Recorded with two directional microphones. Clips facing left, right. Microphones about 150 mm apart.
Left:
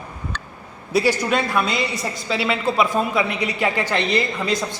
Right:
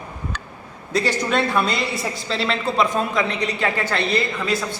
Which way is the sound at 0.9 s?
5° left (ahead or behind).